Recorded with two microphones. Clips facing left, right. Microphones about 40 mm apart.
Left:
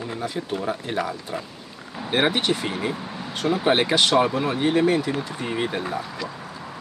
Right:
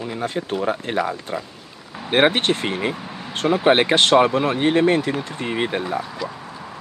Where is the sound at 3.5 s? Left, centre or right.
Right.